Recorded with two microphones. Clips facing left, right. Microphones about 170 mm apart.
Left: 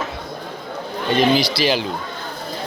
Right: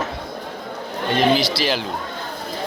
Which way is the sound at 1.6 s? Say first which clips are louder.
Left 3 dB; centre (ahead or behind).